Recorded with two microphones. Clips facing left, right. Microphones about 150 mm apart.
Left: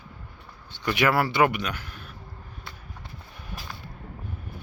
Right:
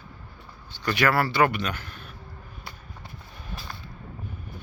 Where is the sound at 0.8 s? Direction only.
20° left (ahead or behind).